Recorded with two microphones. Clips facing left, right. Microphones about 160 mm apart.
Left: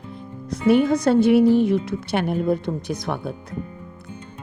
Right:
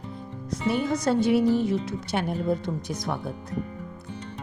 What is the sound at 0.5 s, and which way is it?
A woman's voice, 60° left (ahead or behind).